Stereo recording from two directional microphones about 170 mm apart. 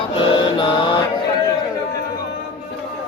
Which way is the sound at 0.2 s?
30° left (ahead or behind).